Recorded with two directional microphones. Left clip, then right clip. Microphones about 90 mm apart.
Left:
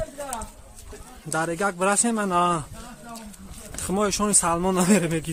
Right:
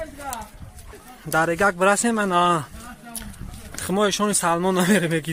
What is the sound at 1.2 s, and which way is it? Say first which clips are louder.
Speech: right 6 dB; 50° right (ahead or behind).